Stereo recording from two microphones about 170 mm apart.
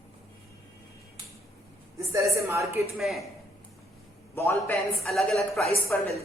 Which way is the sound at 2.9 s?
Centre (ahead or behind).